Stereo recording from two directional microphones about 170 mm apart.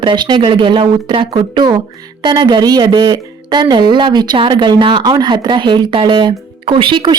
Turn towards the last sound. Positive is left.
turn(degrees=-30)  # may be behind; listen again after turning